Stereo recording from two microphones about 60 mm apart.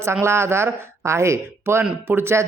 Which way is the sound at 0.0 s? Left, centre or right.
Right.